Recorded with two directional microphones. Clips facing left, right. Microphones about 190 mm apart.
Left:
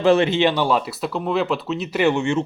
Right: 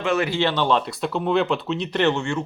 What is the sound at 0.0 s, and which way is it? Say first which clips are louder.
A man's voice: left 6 dB; 30° left (ahead or behind).